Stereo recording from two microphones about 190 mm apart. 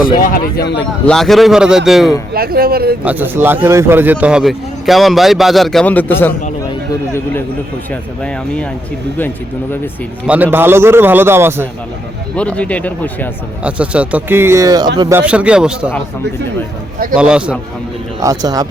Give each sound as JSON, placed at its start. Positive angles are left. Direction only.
{"t": 0.0, "sound": "speech", "side_deg": 50}
{"t": 1.0, "sound": "speech", "side_deg": 0}
{"t": 2.3, "sound": "speech", "side_deg": -50}
{"t": 3.0, "sound": "speech", "side_deg": -10}
{"t": 10.2, "sound": "speech", "side_deg": -10}
{"t": 12.4, "sound": "speech", "side_deg": 5}
{"t": 13.7, "sound": "speech", "side_deg": -5}
{"t": 15.2, "sound": "speech", "side_deg": -5}
{"t": 17.2, "sound": "speech", "side_deg": -5}
{"t": 18.2, "sound": "speech", "side_deg": -20}